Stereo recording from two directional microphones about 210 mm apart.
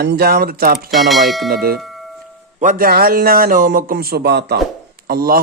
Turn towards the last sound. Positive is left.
turn(degrees=-45)  # may be behind; listen again after turning